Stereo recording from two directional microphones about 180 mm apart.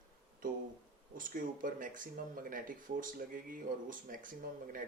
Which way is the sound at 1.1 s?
50° right (ahead or behind).